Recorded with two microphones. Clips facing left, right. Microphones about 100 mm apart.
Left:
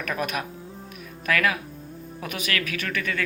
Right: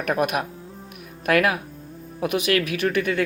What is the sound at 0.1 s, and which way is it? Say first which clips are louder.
Speech: right 7 dB; 55° right (ahead or behind).